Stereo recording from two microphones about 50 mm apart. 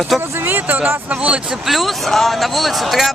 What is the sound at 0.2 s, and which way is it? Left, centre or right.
Speech, right.